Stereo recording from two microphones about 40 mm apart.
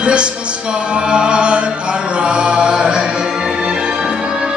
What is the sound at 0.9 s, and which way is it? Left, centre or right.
Chant, right.